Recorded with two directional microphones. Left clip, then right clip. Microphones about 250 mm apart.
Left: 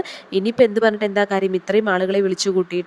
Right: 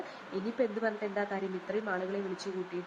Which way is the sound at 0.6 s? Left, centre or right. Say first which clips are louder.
Left 17 dB; left.